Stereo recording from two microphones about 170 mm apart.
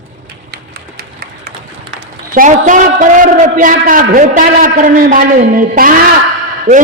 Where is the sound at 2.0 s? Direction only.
55° right (ahead or behind).